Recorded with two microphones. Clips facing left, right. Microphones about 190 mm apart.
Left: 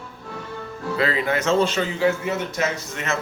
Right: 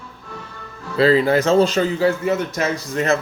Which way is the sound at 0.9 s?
30° right (ahead or behind).